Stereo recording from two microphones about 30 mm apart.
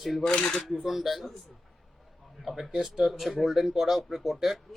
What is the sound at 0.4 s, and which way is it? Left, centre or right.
Speech, left.